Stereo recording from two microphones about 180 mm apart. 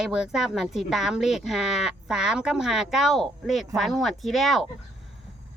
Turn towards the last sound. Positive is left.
turn(degrees=0)  # may be behind; listen again after turning